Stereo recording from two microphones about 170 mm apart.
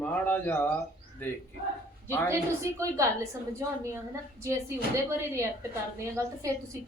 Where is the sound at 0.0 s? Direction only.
10° left (ahead or behind).